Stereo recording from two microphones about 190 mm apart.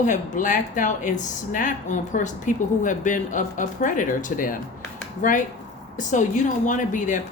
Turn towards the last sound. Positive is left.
turn(degrees=40)  # may be behind; listen again after turning